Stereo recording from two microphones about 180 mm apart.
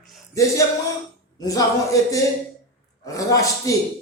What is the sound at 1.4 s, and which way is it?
Speech, 20° left (ahead or behind).